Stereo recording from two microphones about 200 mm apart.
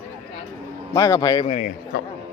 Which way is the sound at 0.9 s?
20° left (ahead or behind).